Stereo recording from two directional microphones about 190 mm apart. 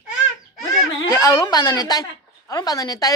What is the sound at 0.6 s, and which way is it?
Speech, 20° left (ahead or behind).